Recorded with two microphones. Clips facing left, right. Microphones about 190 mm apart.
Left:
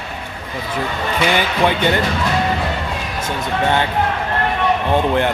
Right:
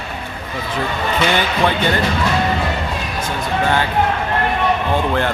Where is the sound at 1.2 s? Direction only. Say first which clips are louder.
Left 1 dB; 15° left (ahead or behind).